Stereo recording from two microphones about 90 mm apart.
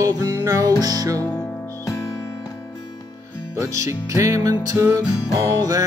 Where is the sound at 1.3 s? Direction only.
30° left (ahead or behind).